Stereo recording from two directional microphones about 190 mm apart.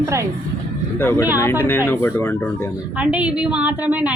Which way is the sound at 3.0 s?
5° right (ahead or behind).